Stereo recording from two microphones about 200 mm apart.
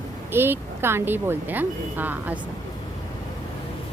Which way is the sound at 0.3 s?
10° right (ahead or behind).